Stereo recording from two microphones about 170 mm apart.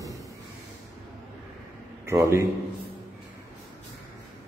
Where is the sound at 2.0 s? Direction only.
15° right (ahead or behind).